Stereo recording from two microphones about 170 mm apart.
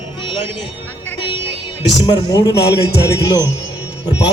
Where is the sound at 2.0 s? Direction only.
25° left (ahead or behind).